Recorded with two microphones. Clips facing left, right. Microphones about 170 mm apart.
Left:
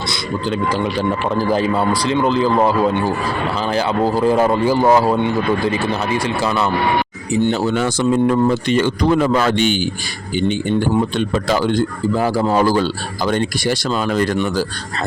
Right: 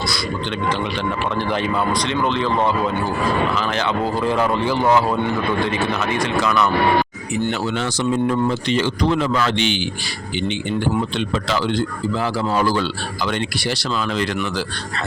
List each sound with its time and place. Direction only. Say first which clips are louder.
1.4 s speech: left 5 dB; 35° left (ahead or behind)
7.6 s speech: left 5 dB; 45° left (ahead or behind)
11.2 s speech: left 4 dB; 45° left (ahead or behind)